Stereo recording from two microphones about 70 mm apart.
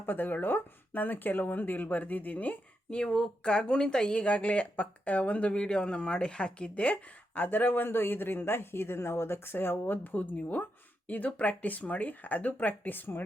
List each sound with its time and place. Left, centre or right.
0.0 s speech: left
3.0 s speech: centre; by 13.2 s left